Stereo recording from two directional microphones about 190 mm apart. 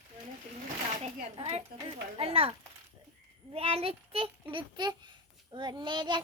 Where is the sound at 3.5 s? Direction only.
30° right (ahead or behind).